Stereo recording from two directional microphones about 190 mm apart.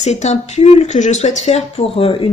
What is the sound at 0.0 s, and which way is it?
Speech, 35° left (ahead or behind).